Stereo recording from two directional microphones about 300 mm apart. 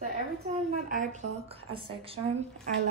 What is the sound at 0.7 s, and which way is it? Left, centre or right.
A woman's voice, right.